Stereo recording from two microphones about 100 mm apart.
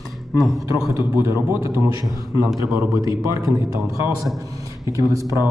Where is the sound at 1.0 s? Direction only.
25° right (ahead or behind).